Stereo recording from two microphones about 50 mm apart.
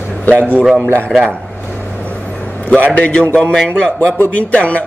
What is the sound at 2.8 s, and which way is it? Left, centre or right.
Speech, left.